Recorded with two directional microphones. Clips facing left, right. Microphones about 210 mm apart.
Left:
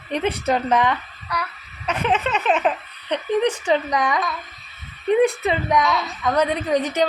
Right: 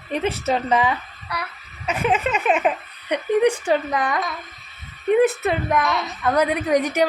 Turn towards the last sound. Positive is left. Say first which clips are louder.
# right 1 dB
turn(degrees=-10)  # may be behind; listen again after turning